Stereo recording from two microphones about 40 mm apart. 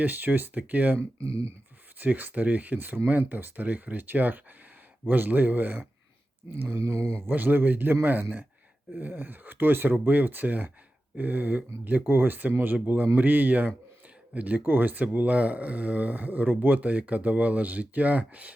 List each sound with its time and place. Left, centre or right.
0.0 s speech: right
2.0 s speech: right
6.5 s speech: right
7.3 s speech: right
14.6 s speech: right